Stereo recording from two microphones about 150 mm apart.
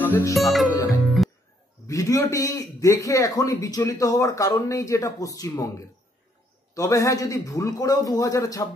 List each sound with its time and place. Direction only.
0.0 s music: 15° left (ahead or behind)
0.3 s speech: centre (ahead or behind)
1.0 s music: centre (ahead or behind)
1.9 s a man's voice: 20° left (ahead or behind)